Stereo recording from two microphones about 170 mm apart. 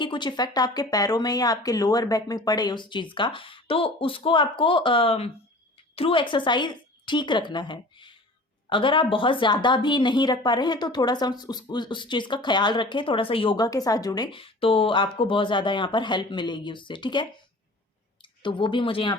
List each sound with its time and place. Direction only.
0.0 s a woman's voice: 25° left (ahead or behind)